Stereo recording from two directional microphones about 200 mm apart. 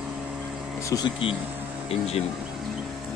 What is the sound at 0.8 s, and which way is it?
Speech, 20° left (ahead or behind).